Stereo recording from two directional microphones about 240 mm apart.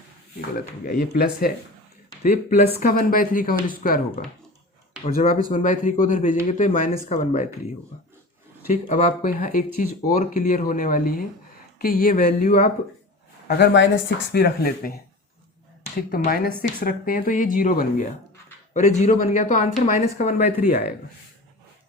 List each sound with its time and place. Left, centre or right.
0.6 s speech: left
2.8 s speech: left
8.6 s speech: left
16.1 s speech: left
20.7 s speech: left